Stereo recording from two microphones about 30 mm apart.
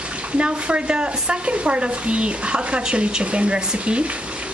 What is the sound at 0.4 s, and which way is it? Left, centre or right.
Speech, right.